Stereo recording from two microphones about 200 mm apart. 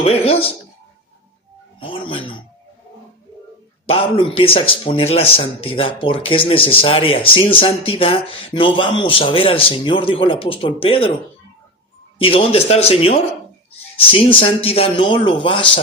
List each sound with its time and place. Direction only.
0.0 s speech: 30° left (ahead or behind)
1.8 s speech: 25° left (ahead or behind)
3.8 s speech: 30° left (ahead or behind)
12.2 s speech: 30° left (ahead or behind)